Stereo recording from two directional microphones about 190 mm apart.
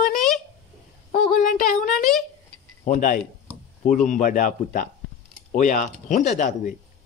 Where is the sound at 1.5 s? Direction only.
45° left (ahead or behind).